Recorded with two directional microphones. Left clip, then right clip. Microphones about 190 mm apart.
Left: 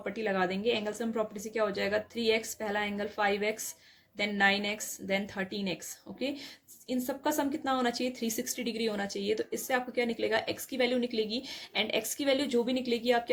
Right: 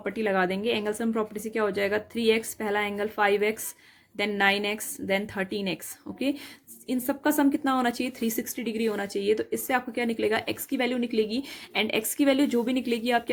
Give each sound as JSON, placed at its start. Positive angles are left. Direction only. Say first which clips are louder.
{"t": 0.0, "sound": "speech", "louder": "right 5 dB", "side_deg": -40}